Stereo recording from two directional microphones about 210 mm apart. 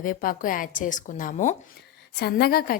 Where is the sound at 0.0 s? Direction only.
40° left (ahead or behind).